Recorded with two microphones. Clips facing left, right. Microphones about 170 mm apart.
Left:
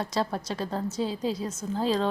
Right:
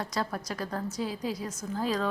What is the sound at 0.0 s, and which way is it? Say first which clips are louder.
A woman's voice: left 4 dB; 25° left (ahead or behind).